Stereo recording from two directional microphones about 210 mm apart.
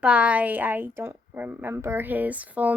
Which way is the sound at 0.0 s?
5° right (ahead or behind).